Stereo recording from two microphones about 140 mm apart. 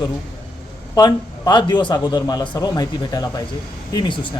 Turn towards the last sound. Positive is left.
turn(degrees=35)  # may be behind; listen again after turning